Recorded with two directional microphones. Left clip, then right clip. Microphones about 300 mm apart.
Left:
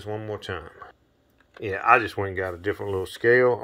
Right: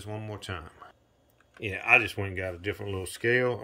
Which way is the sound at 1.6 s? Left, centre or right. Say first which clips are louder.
Left 4 dB; centre.